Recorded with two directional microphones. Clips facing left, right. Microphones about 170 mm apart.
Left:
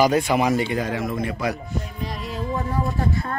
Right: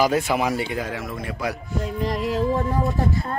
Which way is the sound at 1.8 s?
90° right.